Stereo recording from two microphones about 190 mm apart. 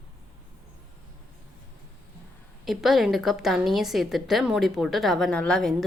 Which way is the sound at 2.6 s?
Centre (ahead or behind).